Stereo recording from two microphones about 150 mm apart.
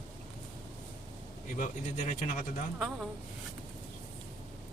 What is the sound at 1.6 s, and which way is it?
Speech, 55° left (ahead or behind).